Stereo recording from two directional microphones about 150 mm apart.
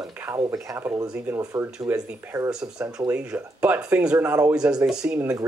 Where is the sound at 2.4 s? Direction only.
5° right (ahead or behind).